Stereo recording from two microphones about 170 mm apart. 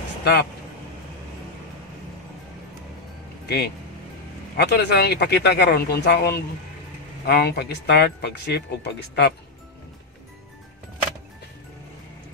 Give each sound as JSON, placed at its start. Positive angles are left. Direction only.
{"t": 0.2, "sound": "speech", "side_deg": 70}
{"t": 3.4, "sound": "speech", "side_deg": 70}